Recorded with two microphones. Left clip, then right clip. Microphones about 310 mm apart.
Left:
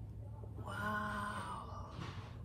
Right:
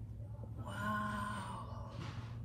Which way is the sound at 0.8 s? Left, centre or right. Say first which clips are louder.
Right 1 dB; left.